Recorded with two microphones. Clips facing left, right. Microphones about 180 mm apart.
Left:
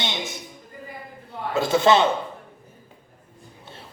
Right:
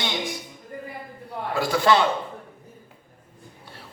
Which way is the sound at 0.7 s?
55° right (ahead or behind).